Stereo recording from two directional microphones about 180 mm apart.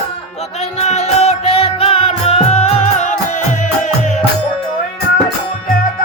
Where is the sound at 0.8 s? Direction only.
35° left (ahead or behind).